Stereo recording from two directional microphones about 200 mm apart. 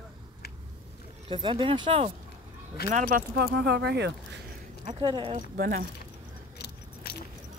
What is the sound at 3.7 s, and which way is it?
Speech, 55° right (ahead or behind).